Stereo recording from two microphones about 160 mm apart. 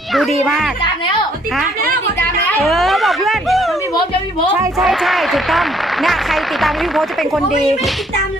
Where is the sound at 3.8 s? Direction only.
20° left (ahead or behind).